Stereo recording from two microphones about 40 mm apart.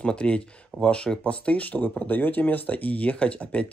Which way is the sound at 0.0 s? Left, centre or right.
Left.